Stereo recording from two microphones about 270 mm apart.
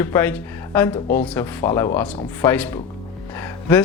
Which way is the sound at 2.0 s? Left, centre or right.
Left.